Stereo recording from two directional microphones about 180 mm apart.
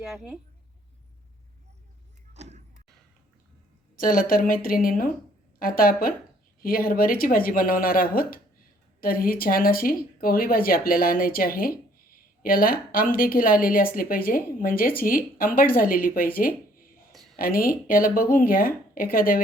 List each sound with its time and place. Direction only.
0.1 s a woman's voice: centre (ahead or behind)
2.3 s a sound: 40° right (ahead or behind)
3.9 s a woman's voice: 50° left (ahead or behind)